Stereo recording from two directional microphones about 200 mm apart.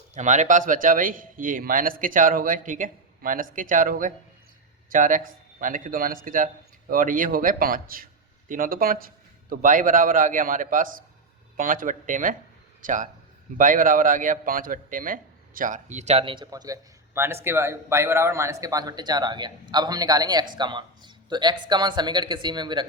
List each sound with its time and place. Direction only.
0.1 s a man's voice: 35° right (ahead or behind)